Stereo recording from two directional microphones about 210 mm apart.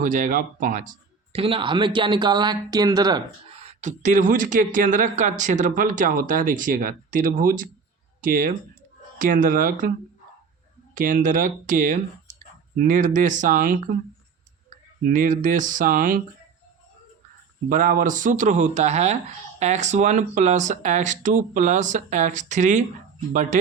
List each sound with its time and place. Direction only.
0.0 s speech: 40° right (ahead or behind)
10.9 s speech: 40° right (ahead or behind)
15.0 s speech: 40° right (ahead or behind)
17.7 s speech: 40° right (ahead or behind)